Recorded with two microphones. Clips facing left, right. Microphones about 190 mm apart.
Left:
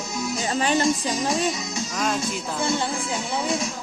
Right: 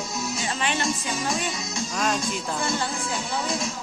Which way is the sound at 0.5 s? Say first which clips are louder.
Left 8 dB; 40° left (ahead or behind).